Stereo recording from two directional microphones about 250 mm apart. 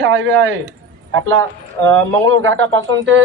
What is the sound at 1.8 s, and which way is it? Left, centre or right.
Speech, right.